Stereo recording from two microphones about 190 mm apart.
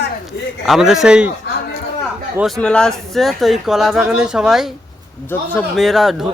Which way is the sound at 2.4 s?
Centre (ahead or behind).